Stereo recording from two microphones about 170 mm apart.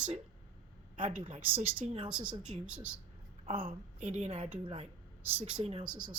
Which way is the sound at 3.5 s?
30° right (ahead or behind).